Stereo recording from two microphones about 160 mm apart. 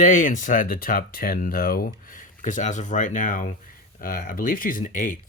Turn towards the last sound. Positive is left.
turn(degrees=55)  # may be behind; listen again after turning